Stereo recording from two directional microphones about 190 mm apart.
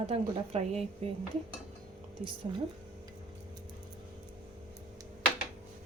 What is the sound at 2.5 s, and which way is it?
Speech, 25° right (ahead or behind).